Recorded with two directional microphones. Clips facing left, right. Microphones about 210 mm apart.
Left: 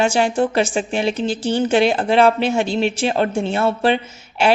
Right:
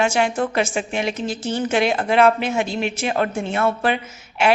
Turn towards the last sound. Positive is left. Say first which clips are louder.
# left 2 dB
turn(degrees=30)  # may be behind; listen again after turning